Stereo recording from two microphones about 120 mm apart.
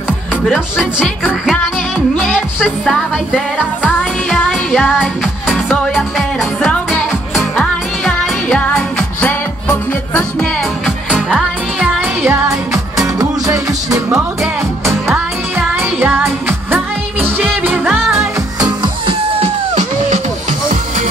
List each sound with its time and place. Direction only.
0.5 s speech: 5° right (ahead or behind)
2.1 s music: centre (ahead or behind)
11.1 s music: 10° right (ahead or behind)
18.1 s music: 35° right (ahead or behind)
19.4 s music: 80° right